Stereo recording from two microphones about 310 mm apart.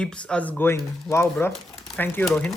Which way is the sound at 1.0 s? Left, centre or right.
Centre.